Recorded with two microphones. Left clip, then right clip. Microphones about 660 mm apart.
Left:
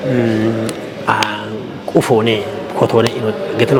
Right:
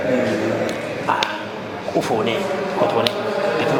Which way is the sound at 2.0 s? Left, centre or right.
Left.